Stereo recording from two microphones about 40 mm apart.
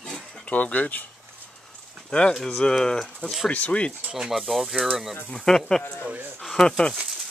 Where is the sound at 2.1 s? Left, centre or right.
Left.